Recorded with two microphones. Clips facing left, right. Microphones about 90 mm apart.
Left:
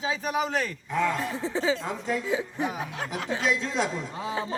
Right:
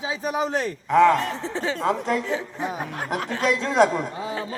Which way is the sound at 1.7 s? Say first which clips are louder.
Right 5 dB; 70° right (ahead or behind).